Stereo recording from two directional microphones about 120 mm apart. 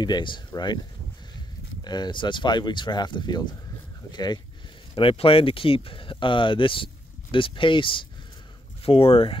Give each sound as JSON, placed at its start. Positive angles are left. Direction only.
{"t": 0.0, "sound": "speech", "side_deg": 40}
{"t": 1.9, "sound": "speech", "side_deg": 40}
{"t": 4.9, "sound": "speech", "side_deg": 50}